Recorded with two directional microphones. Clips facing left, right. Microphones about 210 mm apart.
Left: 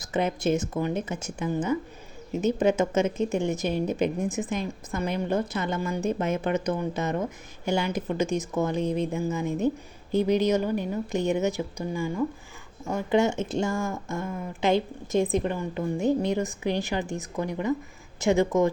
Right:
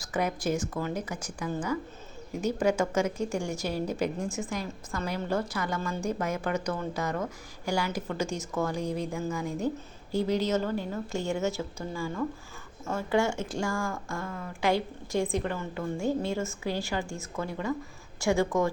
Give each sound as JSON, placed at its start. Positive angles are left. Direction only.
{"t": 0.0, "sound": "a woman's voice", "side_deg": 25}